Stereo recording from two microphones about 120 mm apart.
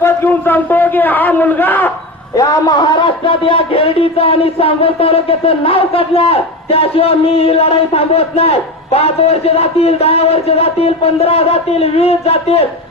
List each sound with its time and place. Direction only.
0.0 s a man's voice: 20° left (ahead or behind)
2.3 s a man's voice: 30° left (ahead or behind)
3.2 s speech: 50° left (ahead or behind)